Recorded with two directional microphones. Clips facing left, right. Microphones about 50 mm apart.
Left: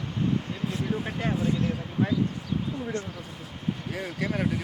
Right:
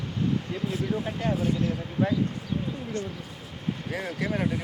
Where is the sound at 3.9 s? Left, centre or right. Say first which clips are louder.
Right 2 dB; centre.